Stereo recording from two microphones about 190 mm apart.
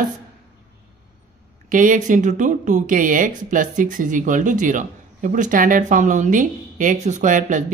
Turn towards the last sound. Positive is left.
turn(degrees=-40)  # may be behind; listen again after turning